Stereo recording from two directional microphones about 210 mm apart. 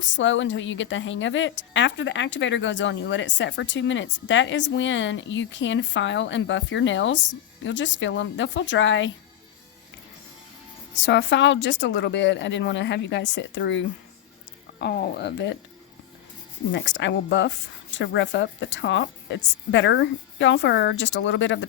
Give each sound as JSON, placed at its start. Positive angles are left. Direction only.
{"t": 0.0, "sound": "a woman's voice", "side_deg": 60}
{"t": 11.0, "sound": "a woman's voice", "side_deg": 55}
{"t": 16.7, "sound": "a woman's voice", "side_deg": 60}